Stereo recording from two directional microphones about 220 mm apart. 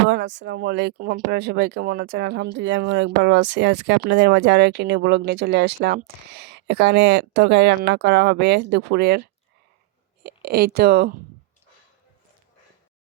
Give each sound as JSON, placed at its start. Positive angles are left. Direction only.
{"t": 0.1, "sound": "speech", "side_deg": -50}